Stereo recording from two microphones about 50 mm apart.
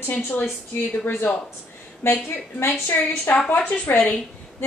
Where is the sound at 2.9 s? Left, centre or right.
Left.